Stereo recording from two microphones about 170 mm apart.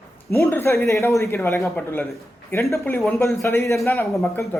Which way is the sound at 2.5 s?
15° left (ahead or behind).